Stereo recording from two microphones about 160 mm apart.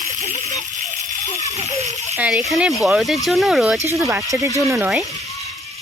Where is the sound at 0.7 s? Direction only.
50° right (ahead or behind).